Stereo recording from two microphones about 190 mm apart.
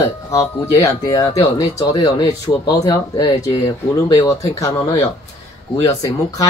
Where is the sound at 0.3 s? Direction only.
15° left (ahead or behind).